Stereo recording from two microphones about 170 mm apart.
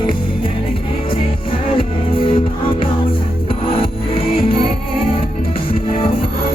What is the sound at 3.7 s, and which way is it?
Music, 35° left (ahead or behind).